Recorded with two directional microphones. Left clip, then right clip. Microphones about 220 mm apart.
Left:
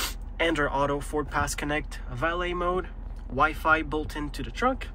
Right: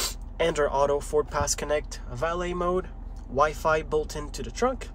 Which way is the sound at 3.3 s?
30° right (ahead or behind).